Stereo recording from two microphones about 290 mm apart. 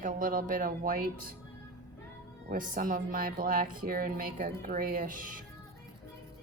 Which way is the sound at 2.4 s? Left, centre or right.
Right.